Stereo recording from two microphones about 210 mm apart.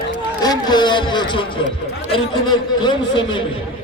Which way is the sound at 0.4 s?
20° left (ahead or behind).